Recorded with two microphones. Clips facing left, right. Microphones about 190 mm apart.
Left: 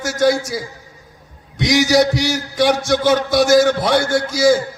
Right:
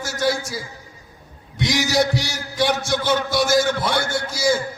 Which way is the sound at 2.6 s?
55° left (ahead or behind).